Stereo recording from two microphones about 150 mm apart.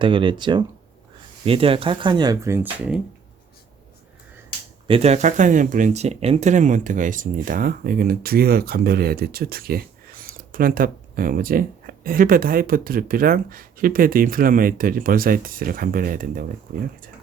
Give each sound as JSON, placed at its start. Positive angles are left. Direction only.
{"t": 0.0, "sound": "speech", "side_deg": -35}
{"t": 2.7, "sound": "speech", "side_deg": -10}
{"t": 4.9, "sound": "speech", "side_deg": -45}
{"t": 10.2, "sound": "speech", "side_deg": -70}